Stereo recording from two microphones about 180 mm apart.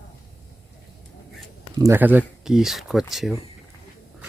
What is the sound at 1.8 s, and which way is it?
Speech, 10° right (ahead or behind).